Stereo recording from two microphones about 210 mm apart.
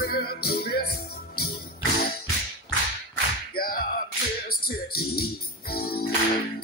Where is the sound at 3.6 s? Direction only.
45° left (ahead or behind).